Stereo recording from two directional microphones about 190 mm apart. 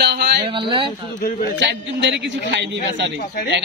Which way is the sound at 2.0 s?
65° right (ahead or behind).